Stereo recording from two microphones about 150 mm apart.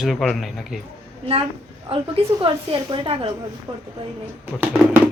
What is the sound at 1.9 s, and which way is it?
A woman's voice, 40° right (ahead or behind).